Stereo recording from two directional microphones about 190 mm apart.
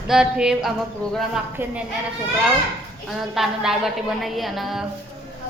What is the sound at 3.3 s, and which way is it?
A woman's voice, centre (ahead or behind).